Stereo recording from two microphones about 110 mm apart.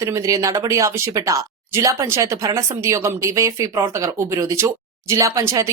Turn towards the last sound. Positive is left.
turn(degrees=-30)  # may be behind; listen again after turning